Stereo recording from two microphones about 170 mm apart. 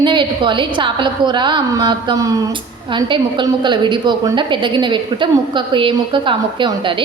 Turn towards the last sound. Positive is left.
turn(degrees=-30)  # may be behind; listen again after turning